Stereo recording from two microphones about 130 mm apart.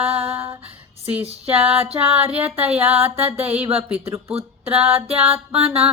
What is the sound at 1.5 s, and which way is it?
Music, 50° right (ahead or behind).